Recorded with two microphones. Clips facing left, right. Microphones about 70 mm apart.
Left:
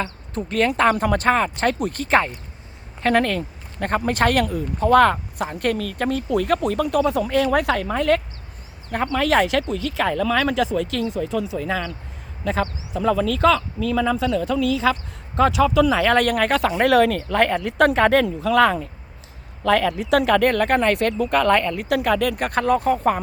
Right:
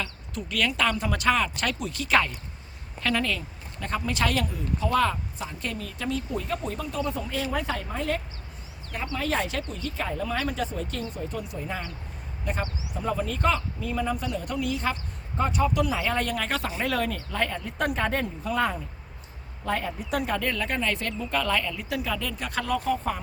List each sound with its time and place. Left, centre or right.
0.0 s speech: left
0.7 s speech: left
3.0 s speech: left
8.9 s speech: left
9.1 s speech: left
13.1 s speech: left
15.4 s speech: left